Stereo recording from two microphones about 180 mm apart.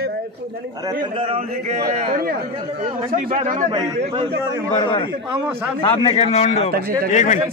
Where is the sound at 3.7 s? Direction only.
25° right (ahead or behind).